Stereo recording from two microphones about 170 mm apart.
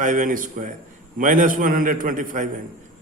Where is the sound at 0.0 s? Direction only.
50° right (ahead or behind).